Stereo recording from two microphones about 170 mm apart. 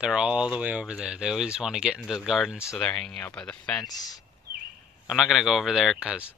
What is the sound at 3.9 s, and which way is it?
Speech, 20° left (ahead or behind).